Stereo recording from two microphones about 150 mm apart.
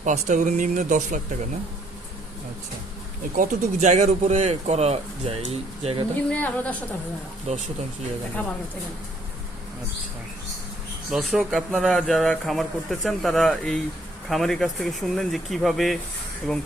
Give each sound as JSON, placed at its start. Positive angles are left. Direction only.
{"t": 0.0, "sound": "speech", "side_deg": -55}
{"t": 3.3, "sound": "speech", "side_deg": -55}
{"t": 6.3, "sound": "a woman's voice", "side_deg": 10}
{"t": 7.5, "sound": "speech", "side_deg": -50}
{"t": 11.1, "sound": "speech", "side_deg": 0}